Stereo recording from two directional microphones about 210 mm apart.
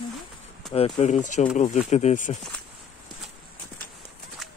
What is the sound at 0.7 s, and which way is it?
Speech, 30° left (ahead or behind).